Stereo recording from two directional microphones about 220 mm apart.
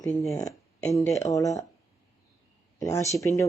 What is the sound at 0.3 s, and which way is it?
Speech, 15° left (ahead or behind).